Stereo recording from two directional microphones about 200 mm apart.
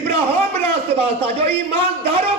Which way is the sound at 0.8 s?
30° right (ahead or behind).